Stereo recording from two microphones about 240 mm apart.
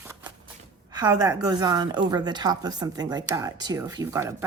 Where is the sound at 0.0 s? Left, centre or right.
Centre.